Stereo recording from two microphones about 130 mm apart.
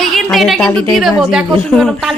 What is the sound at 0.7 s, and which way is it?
Speech, 10° left (ahead or behind).